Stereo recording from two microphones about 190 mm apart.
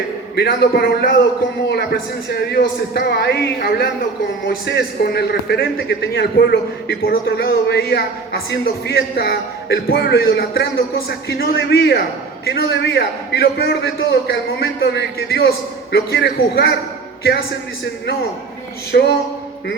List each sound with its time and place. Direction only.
0.3 s a man's voice: 60° left (ahead or behind)
18.9 s a man's voice: 60° left (ahead or behind)